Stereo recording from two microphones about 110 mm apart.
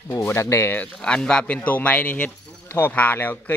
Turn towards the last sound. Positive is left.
turn(degrees=20)  # may be behind; listen again after turning